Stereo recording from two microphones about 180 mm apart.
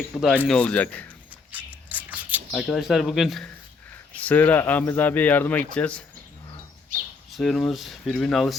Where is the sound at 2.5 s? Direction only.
Centre (ahead or behind).